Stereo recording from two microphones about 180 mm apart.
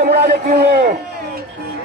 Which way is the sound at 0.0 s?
65° right (ahead or behind).